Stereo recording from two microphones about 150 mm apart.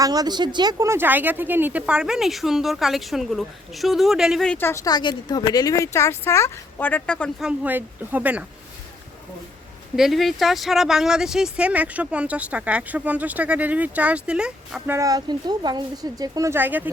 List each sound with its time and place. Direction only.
0.0 s speech: 25° right (ahead or behind); by 4.5 s centre (ahead or behind)
4.5 s speech: 15° left (ahead or behind)
7.3 s speech: 5° right (ahead or behind)
9.9 s speech: centre (ahead or behind)
14.9 s speech: 25° right (ahead or behind)